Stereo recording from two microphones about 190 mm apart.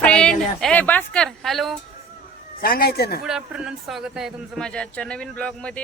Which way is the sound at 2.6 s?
50° left (ahead or behind).